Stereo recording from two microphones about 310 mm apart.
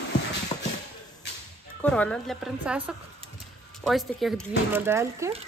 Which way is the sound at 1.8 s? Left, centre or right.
Centre.